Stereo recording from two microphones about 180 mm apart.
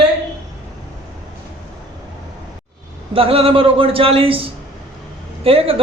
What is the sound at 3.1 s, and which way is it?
A man's voice, 30° right (ahead or behind).